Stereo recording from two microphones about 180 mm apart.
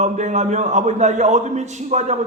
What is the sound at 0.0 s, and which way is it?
A man's voice, 40° right (ahead or behind).